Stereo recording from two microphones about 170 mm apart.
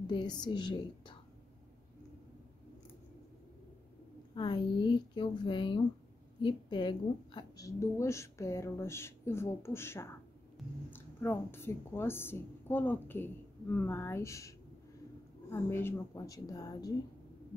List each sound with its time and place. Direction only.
0.0 s a woman's voice: 25° left (ahead or behind)
4.4 s a woman's voice: 30° left (ahead or behind)
15.5 s a woman's voice: 15° left (ahead or behind)